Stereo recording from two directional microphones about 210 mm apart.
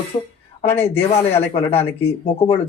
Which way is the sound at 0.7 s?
30° left (ahead or behind).